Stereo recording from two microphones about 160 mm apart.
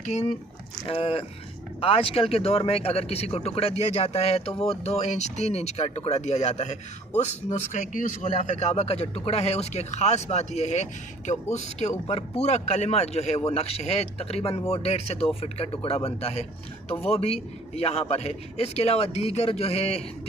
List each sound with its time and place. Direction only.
0.0 s a man's voice: 45° left (ahead or behind)